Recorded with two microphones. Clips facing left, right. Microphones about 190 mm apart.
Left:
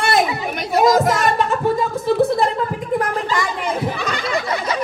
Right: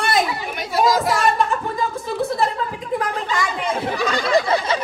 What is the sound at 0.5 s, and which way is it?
Speech, 45° left (ahead or behind).